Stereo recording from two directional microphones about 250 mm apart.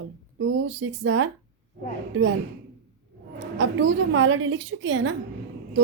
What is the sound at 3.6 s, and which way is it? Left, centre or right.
Speech, right.